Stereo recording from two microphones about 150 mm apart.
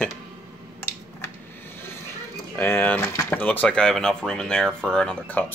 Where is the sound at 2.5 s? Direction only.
15° left (ahead or behind).